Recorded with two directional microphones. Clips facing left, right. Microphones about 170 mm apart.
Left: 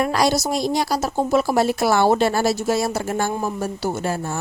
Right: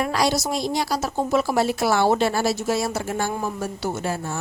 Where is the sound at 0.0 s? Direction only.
45° left (ahead or behind).